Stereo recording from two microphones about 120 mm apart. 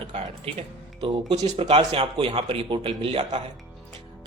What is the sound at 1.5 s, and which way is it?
A man's voice, 50° right (ahead or behind).